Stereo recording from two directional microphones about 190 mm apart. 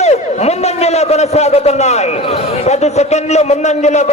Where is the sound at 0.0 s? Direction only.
35° left (ahead or behind).